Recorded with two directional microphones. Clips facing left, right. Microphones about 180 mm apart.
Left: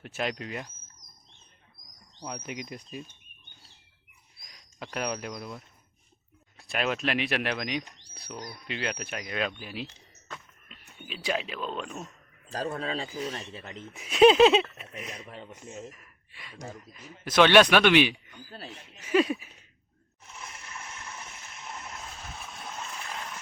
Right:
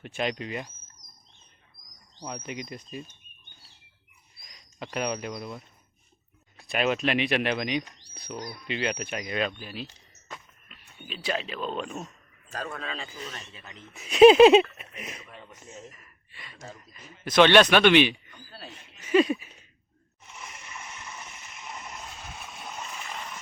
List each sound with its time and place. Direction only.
0.0 s speech: 5° left (ahead or behind)
2.2 s speech: centre (ahead or behind)
4.4 s speech: 5° right (ahead or behind)
9.5 s speech: 10° left (ahead or behind)
9.8 s a sound: 15° right (ahead or behind)
10.9 s speech: 10° left (ahead or behind)
12.5 s a man's voice: 35° left (ahead or behind)
14.1 s a sound: 5° right (ahead or behind)
15.3 s speech: 25° left (ahead or behind)
15.9 s gasp: 5° left (ahead or behind)
16.9 s speech: 5° left (ahead or behind)
18.9 s a sound: 5° left (ahead or behind)